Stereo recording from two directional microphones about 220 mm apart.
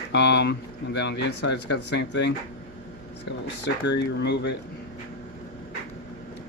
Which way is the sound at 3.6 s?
50° left (ahead or behind).